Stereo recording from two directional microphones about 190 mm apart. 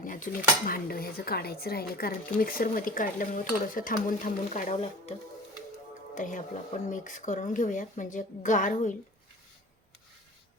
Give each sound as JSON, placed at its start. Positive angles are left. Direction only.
{"t": 0.0, "sound": "speech", "side_deg": 45}
{"t": 6.1, "sound": "a woman's voice", "side_deg": 40}